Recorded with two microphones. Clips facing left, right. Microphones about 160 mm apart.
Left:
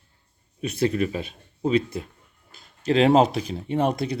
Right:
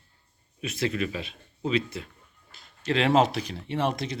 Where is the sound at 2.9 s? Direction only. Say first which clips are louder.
Left 5 dB; 35° left (ahead or behind).